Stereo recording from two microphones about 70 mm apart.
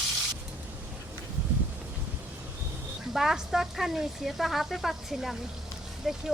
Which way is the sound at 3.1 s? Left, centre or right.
Centre.